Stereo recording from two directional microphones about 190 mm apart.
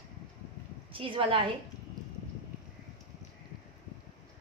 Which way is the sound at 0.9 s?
30° right (ahead or behind).